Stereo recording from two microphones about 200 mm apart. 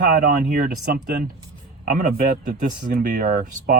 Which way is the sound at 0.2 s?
45° right (ahead or behind).